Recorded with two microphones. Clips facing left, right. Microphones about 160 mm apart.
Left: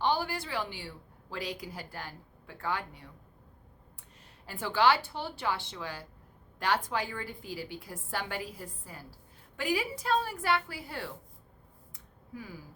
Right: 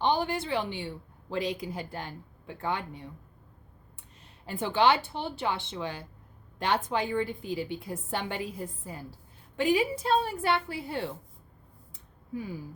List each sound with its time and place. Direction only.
0.0 s a woman's voice: 20° right (ahead or behind)
4.4 s a woman's voice: 20° right (ahead or behind)
12.3 s a woman's voice: 20° right (ahead or behind)